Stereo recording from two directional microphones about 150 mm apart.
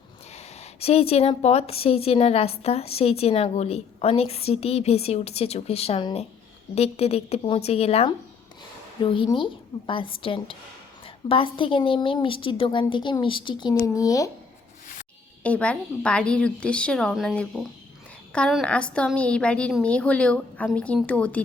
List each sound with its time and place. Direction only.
0.3 s a woman's voice: 45° left (ahead or behind); by 14.3 s 25° left (ahead or behind)
15.4 s a woman's voice: 10° left (ahead or behind)